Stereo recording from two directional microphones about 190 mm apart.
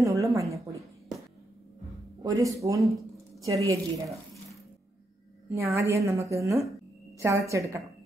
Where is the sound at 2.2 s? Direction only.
15° right (ahead or behind).